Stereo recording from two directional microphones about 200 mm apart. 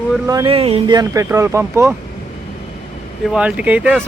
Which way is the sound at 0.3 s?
20° right (ahead or behind).